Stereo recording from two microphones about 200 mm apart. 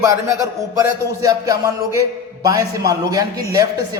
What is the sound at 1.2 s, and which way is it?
Music, 20° right (ahead or behind).